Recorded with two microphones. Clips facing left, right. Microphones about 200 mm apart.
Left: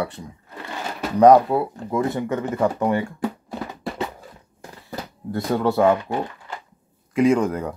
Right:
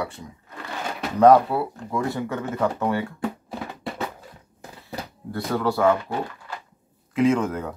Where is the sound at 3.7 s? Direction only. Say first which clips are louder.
Left 2 dB; centre (ahead or behind).